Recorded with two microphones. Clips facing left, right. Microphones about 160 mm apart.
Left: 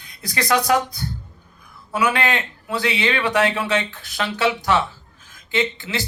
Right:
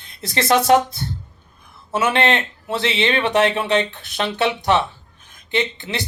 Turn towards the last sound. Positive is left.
turn(degrees=-20)  # may be behind; listen again after turning